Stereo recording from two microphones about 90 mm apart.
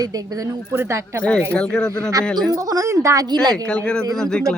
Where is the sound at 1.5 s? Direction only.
10° left (ahead or behind).